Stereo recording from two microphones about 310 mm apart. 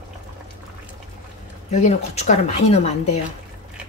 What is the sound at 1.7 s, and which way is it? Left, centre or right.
Speech, left.